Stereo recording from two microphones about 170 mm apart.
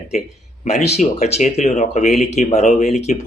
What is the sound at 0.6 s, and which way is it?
Speech, 40° left (ahead or behind).